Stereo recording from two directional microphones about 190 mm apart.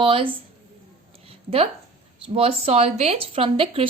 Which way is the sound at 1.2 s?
30° right (ahead or behind).